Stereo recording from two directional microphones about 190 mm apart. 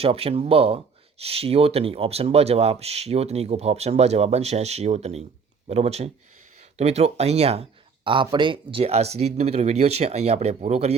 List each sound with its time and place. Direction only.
0.0 s speech: 30° right (ahead or behind)